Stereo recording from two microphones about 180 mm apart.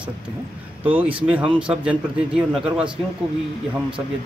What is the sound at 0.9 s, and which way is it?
A man's voice, 10° right (ahead or behind).